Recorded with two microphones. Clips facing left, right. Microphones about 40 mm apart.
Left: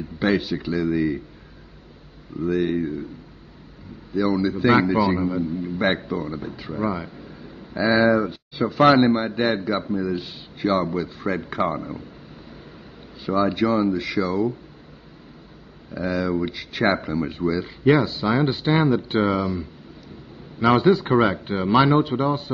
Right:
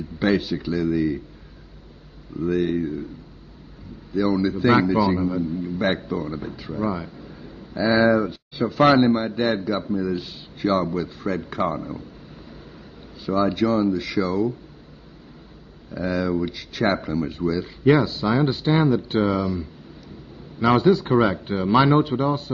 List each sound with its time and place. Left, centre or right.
0.2 s speech: centre
2.4 s speech: centre
4.1 s speech: centre; by 6.0 s left
6.0 s speech: centre; by 8.0 s left
8.0 s a man's voice: centre
11.2 s speech: centre
13.2 s speech: centre
15.9 s speech: centre
16.3 s a man's voice: left
21.7 s speech: centre